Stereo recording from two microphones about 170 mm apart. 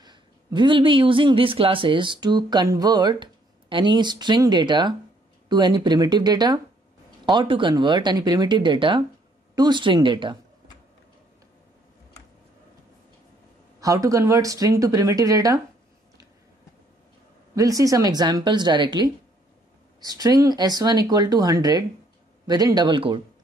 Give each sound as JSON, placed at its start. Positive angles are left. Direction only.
{"t": 0.0, "sound": "speech", "side_deg": -25}
{"t": 13.7, "sound": "speech", "side_deg": -20}
{"t": 17.6, "sound": "speech", "side_deg": -20}